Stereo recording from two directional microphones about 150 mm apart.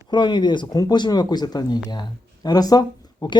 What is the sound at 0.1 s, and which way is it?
Speech, 30° left (ahead or behind).